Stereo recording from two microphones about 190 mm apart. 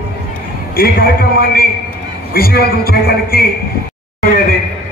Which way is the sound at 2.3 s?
55° left (ahead or behind).